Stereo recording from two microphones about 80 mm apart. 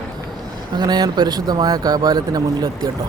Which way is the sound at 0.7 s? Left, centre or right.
Right.